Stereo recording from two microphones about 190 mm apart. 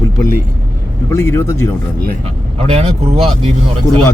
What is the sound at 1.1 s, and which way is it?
Speech, 15° left (ahead or behind).